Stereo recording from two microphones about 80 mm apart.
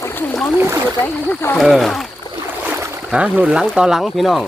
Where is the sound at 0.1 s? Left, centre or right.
Left.